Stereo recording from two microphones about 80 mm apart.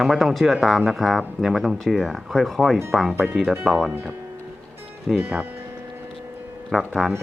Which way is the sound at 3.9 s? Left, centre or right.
Right.